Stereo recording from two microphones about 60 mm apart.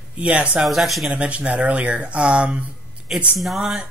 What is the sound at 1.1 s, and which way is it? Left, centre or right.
Speech, centre.